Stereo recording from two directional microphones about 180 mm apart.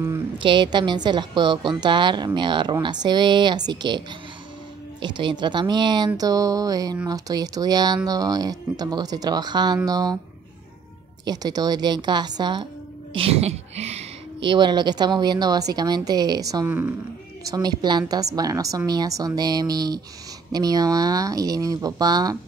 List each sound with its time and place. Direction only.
0.4 s a woman's voice: 25° right (ahead or behind)
5.0 s a woman's voice: 25° right (ahead or behind)
11.2 s a woman's voice: 20° right (ahead or behind)
16.6 s speech: 10° right (ahead or behind)
17.5 s a woman's voice: 25° right (ahead or behind)